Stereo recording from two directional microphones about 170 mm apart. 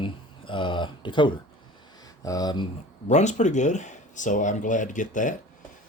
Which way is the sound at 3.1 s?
45° left (ahead or behind).